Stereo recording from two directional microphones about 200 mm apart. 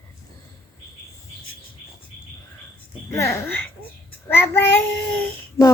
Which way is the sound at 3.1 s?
15° left (ahead or behind).